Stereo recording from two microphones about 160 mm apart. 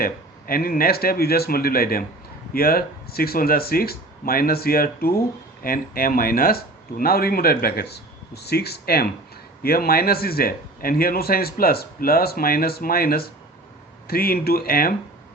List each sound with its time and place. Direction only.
0.0 s a man's voice: 65° left (ahead or behind)
9.6 s a man's voice: 70° left (ahead or behind)